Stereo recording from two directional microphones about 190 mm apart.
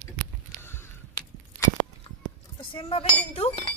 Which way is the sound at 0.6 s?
10° left (ahead or behind).